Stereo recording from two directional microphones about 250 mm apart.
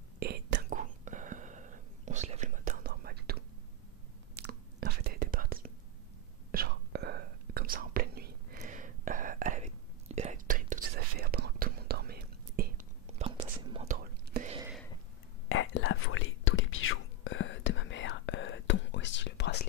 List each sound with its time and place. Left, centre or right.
0.2 s whispering: right
15.4 s whispering: left